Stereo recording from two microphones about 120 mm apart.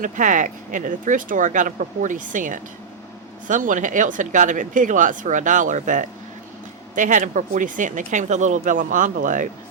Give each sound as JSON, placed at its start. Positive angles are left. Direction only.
{"t": 0.2, "sound": "speech", "side_deg": -90}